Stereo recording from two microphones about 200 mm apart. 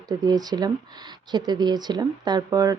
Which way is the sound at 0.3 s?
20° right (ahead or behind).